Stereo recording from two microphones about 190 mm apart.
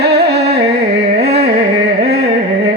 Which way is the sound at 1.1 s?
60° right (ahead or behind).